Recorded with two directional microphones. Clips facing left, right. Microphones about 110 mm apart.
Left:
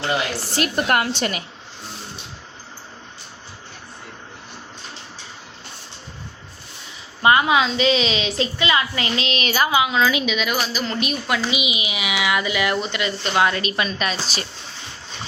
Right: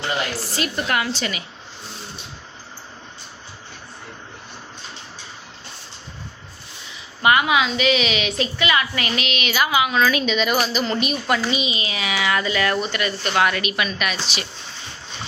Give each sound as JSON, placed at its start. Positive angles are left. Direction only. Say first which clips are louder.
{"t": 0.5, "sound": "a woman's voice", "louder": "left 4 dB", "side_deg": 55}
{"t": 7.2, "sound": "a woman's voice", "louder": "left 1 dB", "side_deg": 30}
{"t": 10.2, "sound": "a woman's voice", "louder": "right 3 dB", "side_deg": 0}
{"t": 11.5, "sound": "a woman's voice", "louder": "right 1 dB", "side_deg": 15}